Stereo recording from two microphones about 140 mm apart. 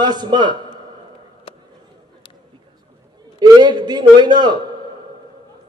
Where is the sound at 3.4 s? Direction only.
30° right (ahead or behind).